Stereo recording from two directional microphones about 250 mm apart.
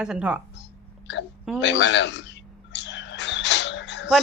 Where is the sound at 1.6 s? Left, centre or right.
Left.